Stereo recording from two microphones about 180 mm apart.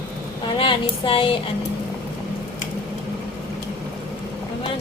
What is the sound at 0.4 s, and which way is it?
Speech, 30° left (ahead or behind).